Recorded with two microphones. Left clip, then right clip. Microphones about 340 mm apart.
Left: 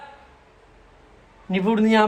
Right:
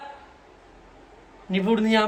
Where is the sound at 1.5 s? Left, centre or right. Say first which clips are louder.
Left 2 dB; centre.